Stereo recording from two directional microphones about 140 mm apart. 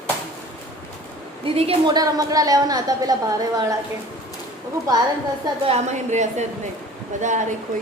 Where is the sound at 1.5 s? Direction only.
45° right (ahead or behind).